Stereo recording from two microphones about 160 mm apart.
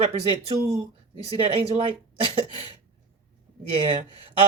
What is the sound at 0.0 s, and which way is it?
Speech, 40° right (ahead or behind).